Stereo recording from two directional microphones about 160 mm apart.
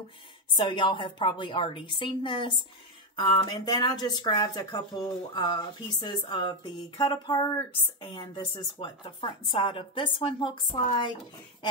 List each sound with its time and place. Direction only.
0.6 s a woman's voice: 30° left (ahead or behind)